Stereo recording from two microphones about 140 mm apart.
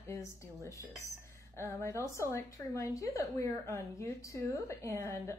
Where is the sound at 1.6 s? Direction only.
20° left (ahead or behind).